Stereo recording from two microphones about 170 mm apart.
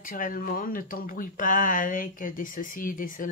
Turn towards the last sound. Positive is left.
turn(degrees=55)  # may be behind; listen again after turning